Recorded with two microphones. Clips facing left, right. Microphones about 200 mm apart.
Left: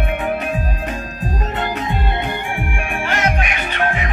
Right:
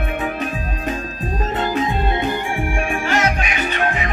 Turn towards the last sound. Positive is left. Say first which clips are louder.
# right 1 dB
turn(degrees=55)  # may be behind; listen again after turning